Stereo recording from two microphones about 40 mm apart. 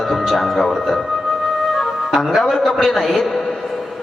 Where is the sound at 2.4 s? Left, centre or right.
Centre.